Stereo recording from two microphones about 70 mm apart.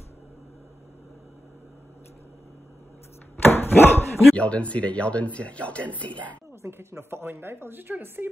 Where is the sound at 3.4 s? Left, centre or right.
Left.